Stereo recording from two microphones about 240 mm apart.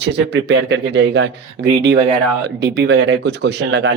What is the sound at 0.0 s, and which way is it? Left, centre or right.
Speech, right.